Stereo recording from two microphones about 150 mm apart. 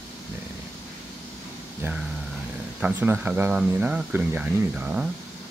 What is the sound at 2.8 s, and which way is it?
Speech, 10° right (ahead or behind).